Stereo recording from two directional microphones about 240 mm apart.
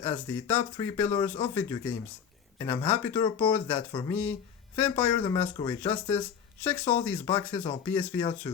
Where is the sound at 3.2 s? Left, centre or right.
Left.